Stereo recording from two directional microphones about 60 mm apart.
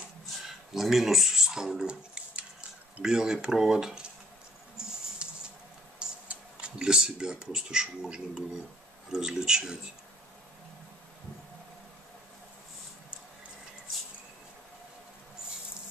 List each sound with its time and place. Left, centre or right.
0.7 s speech: centre
5.2 s patter: centre
5.9 s speech: centre